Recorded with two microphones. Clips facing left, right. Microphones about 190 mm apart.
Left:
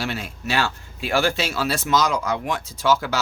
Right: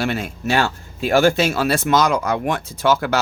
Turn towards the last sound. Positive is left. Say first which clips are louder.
# right 3 dB
turn(degrees=-55)  # may be behind; listen again after turning